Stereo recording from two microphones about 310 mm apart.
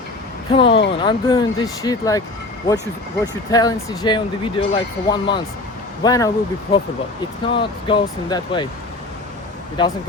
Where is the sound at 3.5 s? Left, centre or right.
Centre.